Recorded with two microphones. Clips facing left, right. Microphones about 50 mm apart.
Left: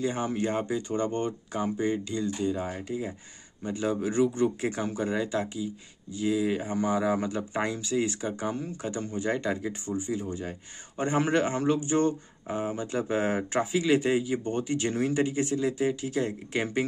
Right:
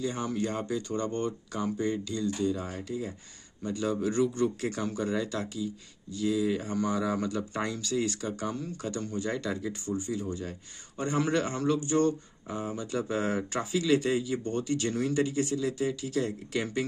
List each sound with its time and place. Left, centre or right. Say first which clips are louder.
0.0 s a man's voice: left 3 dB; left